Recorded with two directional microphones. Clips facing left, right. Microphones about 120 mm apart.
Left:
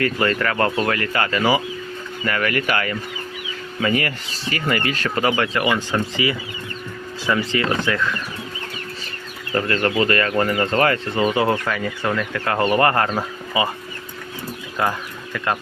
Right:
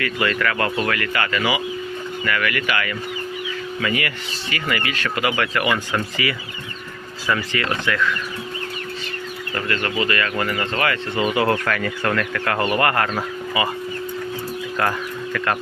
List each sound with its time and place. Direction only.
0.0 s speech: 35° left (ahead or behind)
9.6 s speech: 35° left (ahead or behind)
14.8 s speech: 15° left (ahead or behind)